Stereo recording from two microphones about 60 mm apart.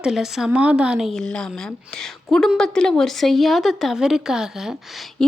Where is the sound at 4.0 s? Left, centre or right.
Centre.